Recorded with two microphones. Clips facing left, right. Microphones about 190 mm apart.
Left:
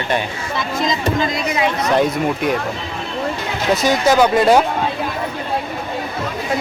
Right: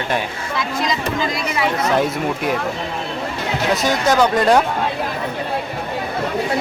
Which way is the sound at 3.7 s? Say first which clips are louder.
Left 3 dB; centre (ahead or behind).